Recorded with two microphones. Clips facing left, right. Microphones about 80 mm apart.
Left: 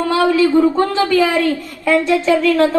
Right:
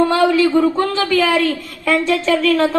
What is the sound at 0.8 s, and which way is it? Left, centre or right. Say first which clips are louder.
A woman's voice: left 2 dB; centre.